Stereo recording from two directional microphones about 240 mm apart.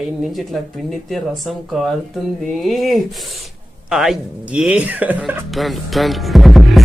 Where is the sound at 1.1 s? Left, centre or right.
Centre.